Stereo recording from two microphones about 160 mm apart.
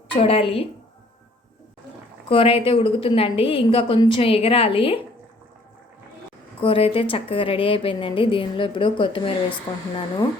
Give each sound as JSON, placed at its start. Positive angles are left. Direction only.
{"t": 0.1, "sound": "a woman's voice", "side_deg": 40}
{"t": 2.3, "sound": "a woman's voice", "side_deg": 35}
{"t": 6.6, "sound": "a woman's voice", "side_deg": 35}